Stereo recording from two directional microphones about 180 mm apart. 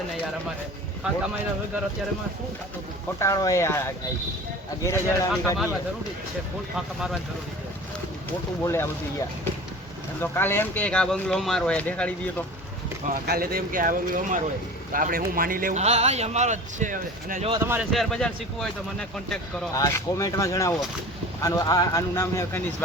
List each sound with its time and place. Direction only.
1.0 s speech: 5° right (ahead or behind)
3.2 s speech: 20° left (ahead or behind)
6.7 s speech: 5° right (ahead or behind)
8.6 s speech: 15° left (ahead or behind)
10.2 s speech: 10° left (ahead or behind)
13.2 s speech: 55° right (ahead or behind)
15.8 s a man's voice: 35° right (ahead or behind)
17.6 s speech: 15° right (ahead or behind)
17.9 s speech: centre (ahead or behind)
19.7 s speech: 15° left (ahead or behind)